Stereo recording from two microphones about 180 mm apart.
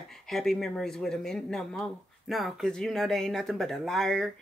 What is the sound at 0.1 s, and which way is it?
Speech, centre (ahead or behind).